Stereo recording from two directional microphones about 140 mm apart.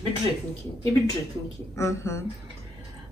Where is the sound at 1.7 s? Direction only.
20° left (ahead or behind).